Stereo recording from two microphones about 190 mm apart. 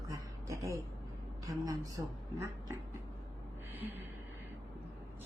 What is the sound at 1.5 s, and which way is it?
Speech, 20° right (ahead or behind).